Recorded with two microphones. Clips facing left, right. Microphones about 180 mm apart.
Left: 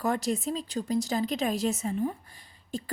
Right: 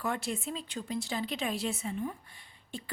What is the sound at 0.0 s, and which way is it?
A woman's voice, 40° left (ahead or behind).